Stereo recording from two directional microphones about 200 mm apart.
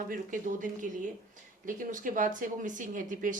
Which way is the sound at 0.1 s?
40° right (ahead or behind).